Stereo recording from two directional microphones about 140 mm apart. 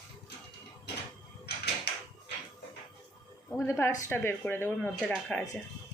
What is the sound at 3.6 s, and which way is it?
A woman's voice, 20° left (ahead or behind).